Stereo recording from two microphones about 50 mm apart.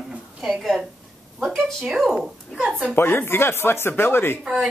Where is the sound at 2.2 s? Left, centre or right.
Centre.